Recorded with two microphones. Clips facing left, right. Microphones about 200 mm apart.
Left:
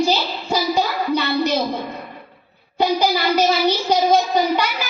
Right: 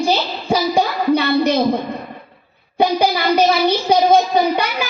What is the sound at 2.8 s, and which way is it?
Child singing, 55° right (ahead or behind).